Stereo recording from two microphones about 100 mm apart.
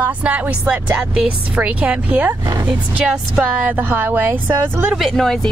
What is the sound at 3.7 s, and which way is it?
Speech, 20° right (ahead or behind).